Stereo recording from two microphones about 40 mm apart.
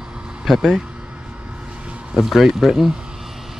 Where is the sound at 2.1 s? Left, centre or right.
Centre.